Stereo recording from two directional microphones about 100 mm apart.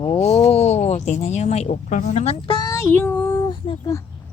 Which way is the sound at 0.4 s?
90° left.